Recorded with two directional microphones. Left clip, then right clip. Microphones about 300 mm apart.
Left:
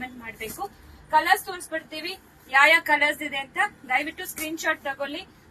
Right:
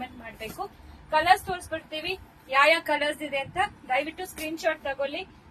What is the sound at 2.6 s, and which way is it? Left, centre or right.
A woman's voice, centre.